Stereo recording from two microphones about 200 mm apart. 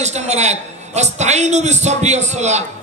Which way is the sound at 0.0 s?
35° right (ahead or behind).